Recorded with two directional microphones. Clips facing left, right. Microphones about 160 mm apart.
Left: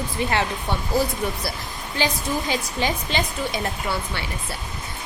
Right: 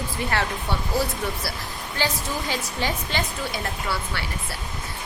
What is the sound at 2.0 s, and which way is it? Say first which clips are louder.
A woman's voice: left 3 dB; 15° left (ahead or behind).